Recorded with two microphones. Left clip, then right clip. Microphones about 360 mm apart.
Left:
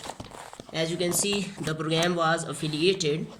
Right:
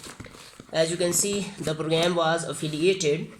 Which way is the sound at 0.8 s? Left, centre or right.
Centre.